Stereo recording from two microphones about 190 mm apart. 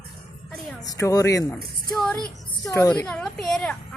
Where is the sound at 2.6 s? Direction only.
15° left (ahead or behind).